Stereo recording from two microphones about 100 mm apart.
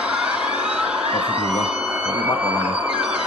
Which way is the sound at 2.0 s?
20° right (ahead or behind).